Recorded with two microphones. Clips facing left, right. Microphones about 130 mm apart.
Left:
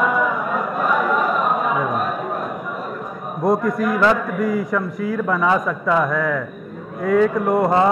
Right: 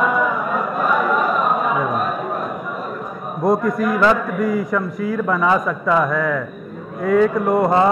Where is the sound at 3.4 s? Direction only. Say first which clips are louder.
Right 1 dB; 20° right (ahead or behind).